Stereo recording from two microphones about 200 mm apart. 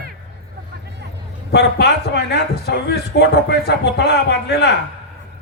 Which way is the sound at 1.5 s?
60° left (ahead or behind).